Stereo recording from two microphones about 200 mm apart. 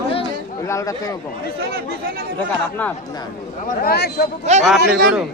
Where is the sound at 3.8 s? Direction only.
55° left (ahead or behind).